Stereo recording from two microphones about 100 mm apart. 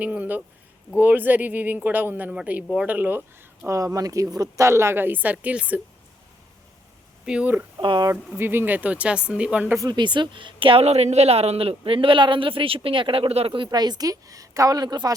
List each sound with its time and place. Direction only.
0.0 s speech: 15° right (ahead or behind)
3.7 s speech: 30° right (ahead or behind); by 5.8 s 15° right (ahead or behind)
7.3 s speech: 15° right (ahead or behind)
7.8 s speech: 55° right (ahead or behind)
8.4 s speech: 20° right (ahead or behind)
9.8 s a woman's voice: 50° right (ahead or behind); by 13.7 s 75° right (ahead or behind)
13.7 s a woman's voice: 45° right (ahead or behind)